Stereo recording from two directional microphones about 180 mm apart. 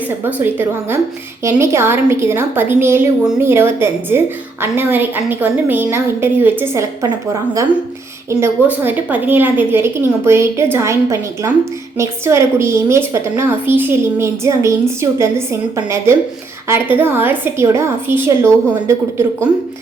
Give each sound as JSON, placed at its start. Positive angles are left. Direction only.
{"t": 0.3, "sound": "a woman's voice", "side_deg": -10}
{"t": 8.3, "sound": "a woman's voice", "side_deg": -15}